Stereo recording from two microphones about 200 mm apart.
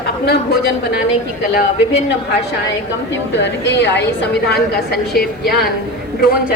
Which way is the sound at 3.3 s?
60° left (ahead or behind).